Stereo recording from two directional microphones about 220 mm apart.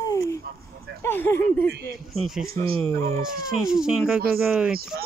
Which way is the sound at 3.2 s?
5° right (ahead or behind).